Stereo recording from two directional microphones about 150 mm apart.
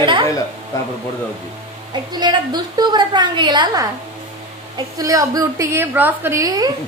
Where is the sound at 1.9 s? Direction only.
30° right (ahead or behind).